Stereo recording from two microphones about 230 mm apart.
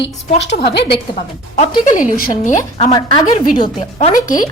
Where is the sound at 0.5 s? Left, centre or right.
Left.